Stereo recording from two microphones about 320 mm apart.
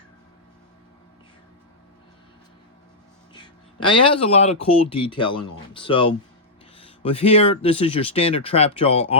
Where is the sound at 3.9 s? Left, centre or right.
Centre.